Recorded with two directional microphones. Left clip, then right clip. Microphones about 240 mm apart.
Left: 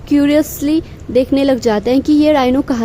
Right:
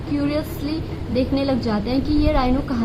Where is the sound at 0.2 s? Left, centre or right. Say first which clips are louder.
Left 11 dB; left.